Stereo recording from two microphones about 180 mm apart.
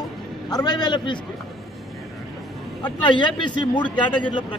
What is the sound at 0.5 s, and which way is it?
Speech, 20° left (ahead or behind).